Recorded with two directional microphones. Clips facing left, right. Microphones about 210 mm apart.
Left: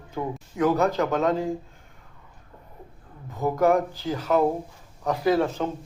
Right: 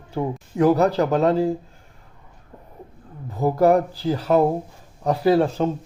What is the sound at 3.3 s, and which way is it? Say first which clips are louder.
Speech: right 4 dB; 35° right (ahead or behind).